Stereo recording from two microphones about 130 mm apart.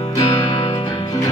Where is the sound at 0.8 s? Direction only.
25° left (ahead or behind).